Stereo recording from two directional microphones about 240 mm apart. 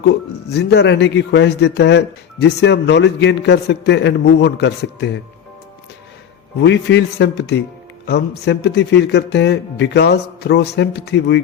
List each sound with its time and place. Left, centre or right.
0.0 s a man's voice: left
6.6 s a man's voice: left